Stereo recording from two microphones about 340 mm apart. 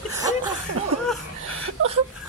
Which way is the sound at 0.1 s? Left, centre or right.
Centre.